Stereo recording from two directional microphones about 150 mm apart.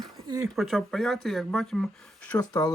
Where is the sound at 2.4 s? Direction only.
25° left (ahead or behind).